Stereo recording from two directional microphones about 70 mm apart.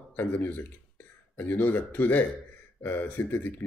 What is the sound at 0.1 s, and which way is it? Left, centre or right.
Speech, left.